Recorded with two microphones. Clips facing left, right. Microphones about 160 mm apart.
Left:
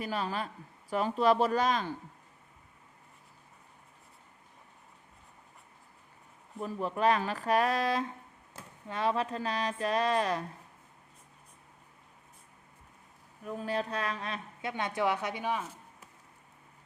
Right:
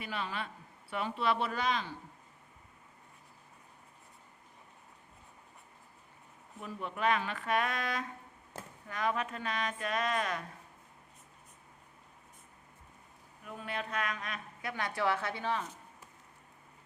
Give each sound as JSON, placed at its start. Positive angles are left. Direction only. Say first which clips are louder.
{"t": 0.0, "sound": "speech", "louder": "left 5 dB", "side_deg": 40}
{"t": 6.6, "sound": "speech", "louder": "left 5 dB", "side_deg": 35}
{"t": 13.4, "sound": "a woman's voice", "louder": "left 7 dB", "side_deg": 35}